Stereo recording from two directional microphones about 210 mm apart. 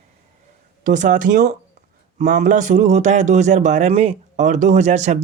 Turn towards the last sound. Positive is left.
turn(degrees=-35)  # may be behind; listen again after turning